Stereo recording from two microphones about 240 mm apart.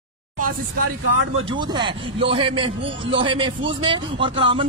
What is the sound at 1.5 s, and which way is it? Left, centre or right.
A man's voice, centre.